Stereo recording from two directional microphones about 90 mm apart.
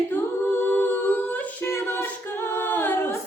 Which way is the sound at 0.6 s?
25° left (ahead or behind).